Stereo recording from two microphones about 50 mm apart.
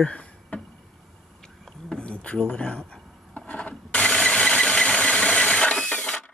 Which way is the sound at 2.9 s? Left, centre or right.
Left.